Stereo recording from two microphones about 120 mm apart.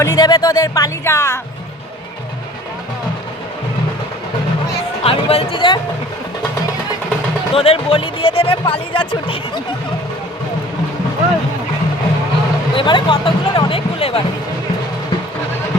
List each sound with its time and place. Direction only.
0.0 s speech: 25° left (ahead or behind)
5.0 s speech: 55° left (ahead or behind)
7.5 s speech: 50° left (ahead or behind)
12.7 s speech: 40° left (ahead or behind)
13.7 s speech: 50° left (ahead or behind)